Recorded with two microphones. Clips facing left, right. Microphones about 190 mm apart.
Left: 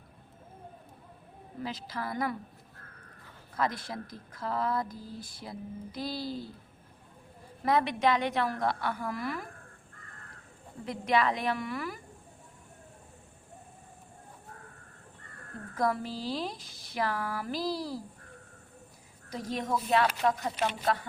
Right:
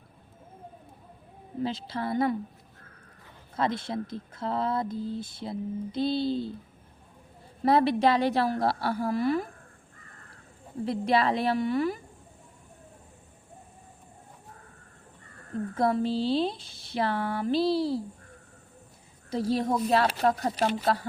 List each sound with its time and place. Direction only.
1.6 s speech: 30° right (ahead or behind)
3.5 s speech: 25° right (ahead or behind)
7.6 s a woman's voice: 30° right (ahead or behind)
10.8 s a woman's voice: 30° right (ahead or behind)
15.7 s speech: 30° right (ahead or behind)
19.3 s a woman's voice: 30° right (ahead or behind)